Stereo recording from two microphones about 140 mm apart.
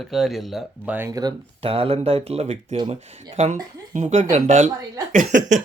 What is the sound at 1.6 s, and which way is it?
Speech, 45° right (ahead or behind).